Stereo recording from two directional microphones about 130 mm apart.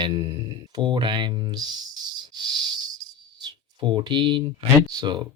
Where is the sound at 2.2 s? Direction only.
35° right (ahead or behind).